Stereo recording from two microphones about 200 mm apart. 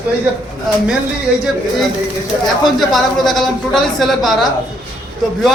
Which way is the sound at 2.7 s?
Centre (ahead or behind).